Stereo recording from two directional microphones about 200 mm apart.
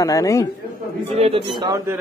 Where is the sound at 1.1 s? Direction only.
30° right (ahead or behind).